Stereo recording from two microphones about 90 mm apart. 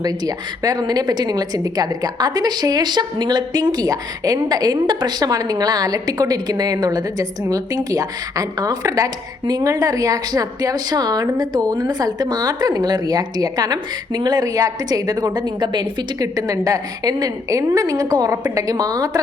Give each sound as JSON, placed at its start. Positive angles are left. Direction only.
{"t": 0.0, "sound": "a woman's voice", "side_deg": -45}
{"t": 14.4, "sound": "a woman's voice", "side_deg": -40}